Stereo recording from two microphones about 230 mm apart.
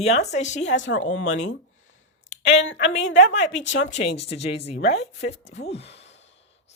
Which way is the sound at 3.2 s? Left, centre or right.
Left.